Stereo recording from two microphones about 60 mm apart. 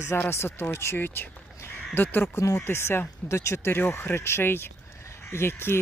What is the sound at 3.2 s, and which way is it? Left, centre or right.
Speech, left.